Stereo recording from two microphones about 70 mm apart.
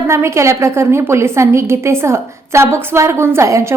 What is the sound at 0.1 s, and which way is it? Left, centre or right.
A woman's voice, right.